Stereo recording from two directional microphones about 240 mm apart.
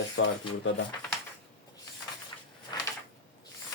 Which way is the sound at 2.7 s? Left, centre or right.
Centre.